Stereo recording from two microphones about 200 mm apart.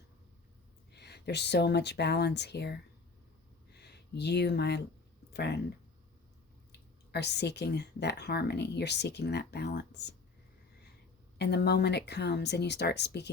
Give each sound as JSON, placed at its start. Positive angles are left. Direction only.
{"t": 0.9, "sound": "speech", "side_deg": 55}
{"t": 3.7, "sound": "a sound", "side_deg": 55}
{"t": 5.3, "sound": "speech", "side_deg": 55}
{"t": 6.7, "sound": "speech", "side_deg": 55}
{"t": 11.3, "sound": "speech", "side_deg": 55}